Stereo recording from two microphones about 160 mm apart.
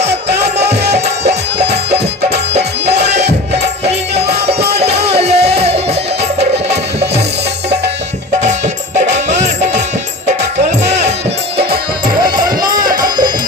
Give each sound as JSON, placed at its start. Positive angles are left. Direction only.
{"t": 0.1, "sound": "music", "side_deg": -90}
{"t": 5.5, "sound": "music", "side_deg": -40}
{"t": 9.0, "sound": "music", "side_deg": -45}
{"t": 12.2, "sound": "music", "side_deg": -60}